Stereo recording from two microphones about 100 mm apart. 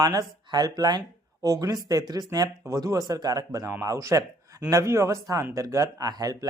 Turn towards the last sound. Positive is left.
turn(degrees=-35)  # may be behind; listen again after turning